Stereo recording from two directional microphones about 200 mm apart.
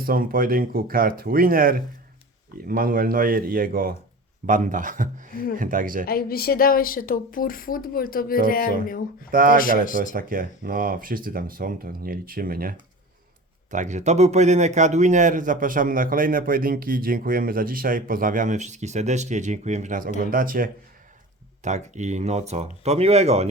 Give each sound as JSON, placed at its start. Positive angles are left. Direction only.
{"t": 0.0, "sound": "a man's voice", "side_deg": -45}
{"t": 6.1, "sound": "a woman's voice", "side_deg": 50}
{"t": 9.3, "sound": "a man's voice", "side_deg": -45}